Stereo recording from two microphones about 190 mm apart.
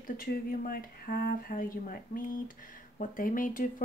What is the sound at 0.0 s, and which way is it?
Speech, 50° left (ahead or behind).